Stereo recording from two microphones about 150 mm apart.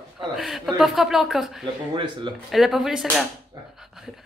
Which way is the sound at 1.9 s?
30° right (ahead or behind).